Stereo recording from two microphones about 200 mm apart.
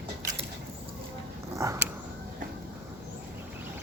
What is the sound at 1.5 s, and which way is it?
Dog, 15° right (ahead or behind).